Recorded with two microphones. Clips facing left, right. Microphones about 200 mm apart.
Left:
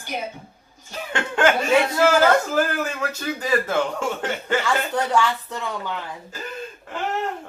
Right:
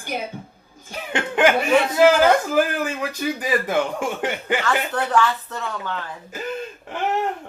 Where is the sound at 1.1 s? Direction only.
15° right (ahead or behind).